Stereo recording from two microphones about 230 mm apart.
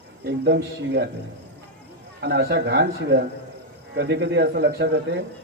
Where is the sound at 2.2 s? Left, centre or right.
Right.